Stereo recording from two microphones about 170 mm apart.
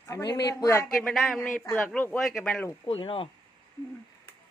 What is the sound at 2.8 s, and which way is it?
Speech, 35° left (ahead or behind).